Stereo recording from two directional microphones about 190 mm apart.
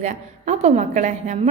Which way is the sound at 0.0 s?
40° right (ahead or behind).